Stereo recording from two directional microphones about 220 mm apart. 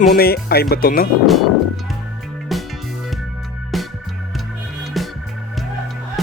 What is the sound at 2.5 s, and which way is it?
Music, centre (ahead or behind).